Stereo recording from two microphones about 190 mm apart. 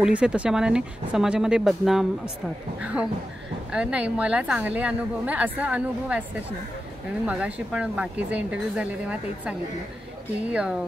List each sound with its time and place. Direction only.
0.0 s a woman's voice: 5° right (ahead or behind)
7.2 s a woman's voice: 5° right (ahead or behind)